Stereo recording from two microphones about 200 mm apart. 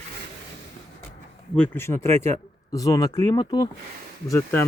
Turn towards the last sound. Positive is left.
turn(degrees=15)  # may be behind; listen again after turning